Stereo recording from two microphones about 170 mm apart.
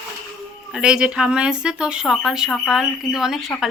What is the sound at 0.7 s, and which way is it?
Speech, 5° right (ahead or behind).